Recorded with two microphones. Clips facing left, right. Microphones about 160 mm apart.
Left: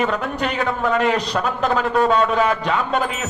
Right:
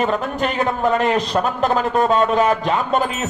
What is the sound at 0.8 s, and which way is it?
Music, 20° right (ahead or behind).